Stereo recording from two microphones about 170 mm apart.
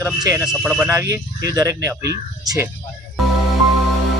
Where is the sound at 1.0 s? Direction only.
20° right (ahead or behind).